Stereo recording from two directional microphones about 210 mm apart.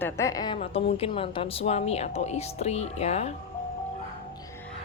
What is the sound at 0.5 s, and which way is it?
Speech, 25° left (ahead or behind).